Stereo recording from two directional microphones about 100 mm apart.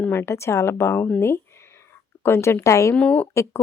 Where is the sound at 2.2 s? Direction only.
25° left (ahead or behind).